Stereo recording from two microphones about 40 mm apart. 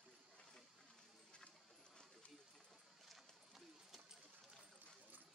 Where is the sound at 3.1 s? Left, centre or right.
Centre.